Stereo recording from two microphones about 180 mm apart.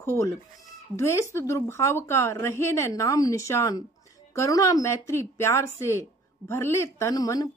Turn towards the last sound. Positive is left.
turn(degrees=20)  # may be behind; listen again after turning